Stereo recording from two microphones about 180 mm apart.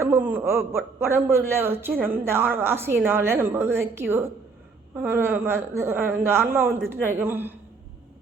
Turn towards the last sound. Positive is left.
turn(degrees=-10)  # may be behind; listen again after turning